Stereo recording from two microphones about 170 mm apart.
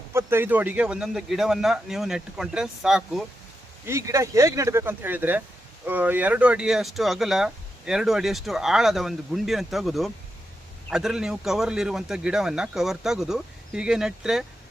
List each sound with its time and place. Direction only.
0.1 s speech: 15° right (ahead or behind)
3.8 s speech: 15° right (ahead or behind)